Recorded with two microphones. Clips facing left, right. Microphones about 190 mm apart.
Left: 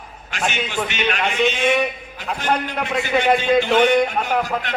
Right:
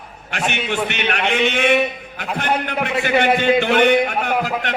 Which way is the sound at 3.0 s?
60° right (ahead or behind).